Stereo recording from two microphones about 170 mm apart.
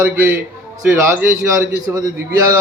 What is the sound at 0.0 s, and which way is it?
Speech, 15° right (ahead or behind).